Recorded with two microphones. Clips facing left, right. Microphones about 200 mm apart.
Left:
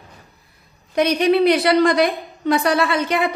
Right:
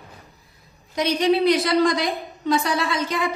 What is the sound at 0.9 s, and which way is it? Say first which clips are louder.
A woman's voice: left 4 dB; 60° left (ahead or behind).